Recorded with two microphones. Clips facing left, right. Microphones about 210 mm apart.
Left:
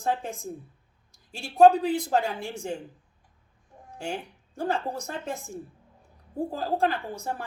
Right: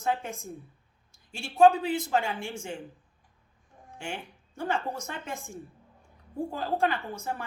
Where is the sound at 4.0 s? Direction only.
40° left (ahead or behind).